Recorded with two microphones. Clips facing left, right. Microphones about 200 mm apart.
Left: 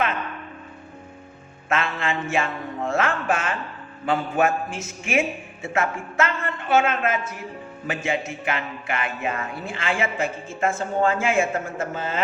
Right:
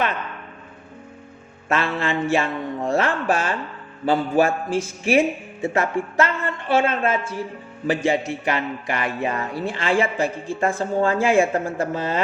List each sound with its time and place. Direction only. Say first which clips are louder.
1.7 s a man's voice: right 3 dB; 35° right (ahead or behind)